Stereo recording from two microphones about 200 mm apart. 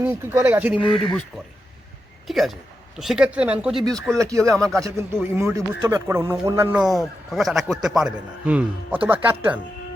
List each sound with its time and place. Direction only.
0.0 s a man's voice: 10° right (ahead or behind)
0.8 s speech: 25° left (ahead or behind)
2.2 s speech: centre (ahead or behind)
4.2 s a man's voice: 15° right (ahead or behind)
4.5 s speech: 5° left (ahead or behind)
4.8 s a man's voice: 15° right (ahead or behind)